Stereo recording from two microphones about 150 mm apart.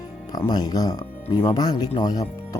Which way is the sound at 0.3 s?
25° left (ahead or behind).